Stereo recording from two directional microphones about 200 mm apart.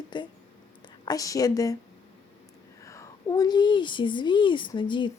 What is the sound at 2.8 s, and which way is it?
A woman's voice, 15° left (ahead or behind).